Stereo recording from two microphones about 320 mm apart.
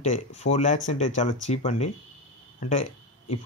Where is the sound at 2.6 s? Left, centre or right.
Left.